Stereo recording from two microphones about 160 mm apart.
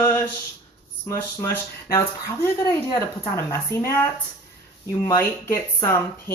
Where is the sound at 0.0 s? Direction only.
10° left (ahead or behind).